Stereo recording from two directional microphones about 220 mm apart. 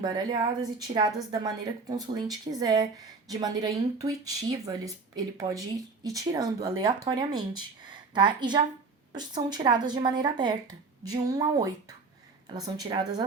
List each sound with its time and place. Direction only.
0.0 s speech: 20° right (ahead or behind)